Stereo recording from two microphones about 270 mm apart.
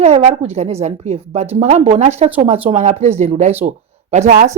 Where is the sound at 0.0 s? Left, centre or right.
Right.